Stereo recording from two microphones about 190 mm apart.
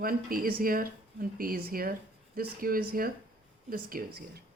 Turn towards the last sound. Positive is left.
turn(degrees=-55)  # may be behind; listen again after turning